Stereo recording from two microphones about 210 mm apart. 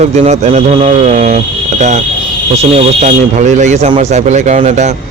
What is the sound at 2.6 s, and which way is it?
Speech, 35° right (ahead or behind).